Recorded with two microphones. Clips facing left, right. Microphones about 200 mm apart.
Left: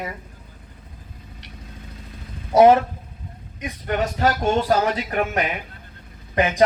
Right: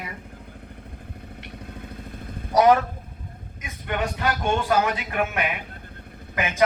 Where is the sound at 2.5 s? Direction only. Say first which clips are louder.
Left 4 dB; 25° left (ahead or behind).